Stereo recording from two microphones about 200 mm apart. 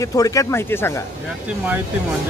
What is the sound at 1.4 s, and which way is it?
Speech, 10° right (ahead or behind).